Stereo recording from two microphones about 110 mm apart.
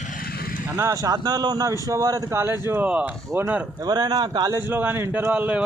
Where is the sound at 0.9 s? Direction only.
35° right (ahead or behind).